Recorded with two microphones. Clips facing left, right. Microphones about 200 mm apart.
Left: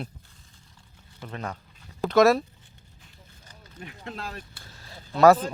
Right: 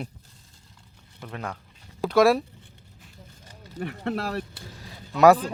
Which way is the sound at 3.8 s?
65° right (ahead or behind).